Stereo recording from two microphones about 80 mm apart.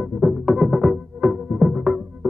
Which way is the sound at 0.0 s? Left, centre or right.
Centre.